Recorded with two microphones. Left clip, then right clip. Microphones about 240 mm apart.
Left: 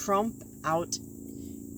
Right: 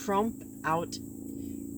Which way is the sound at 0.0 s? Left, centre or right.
Left.